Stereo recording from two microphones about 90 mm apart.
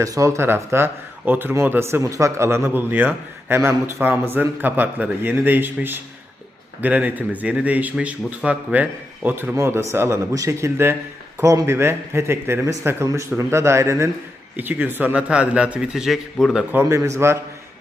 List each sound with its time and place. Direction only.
0.0 s a man's voice: 35° right (ahead or behind)
14.5 s speech: 20° right (ahead or behind)
16.7 s a man's voice: 30° right (ahead or behind)